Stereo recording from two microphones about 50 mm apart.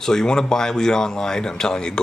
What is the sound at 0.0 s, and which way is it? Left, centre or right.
Speech, centre.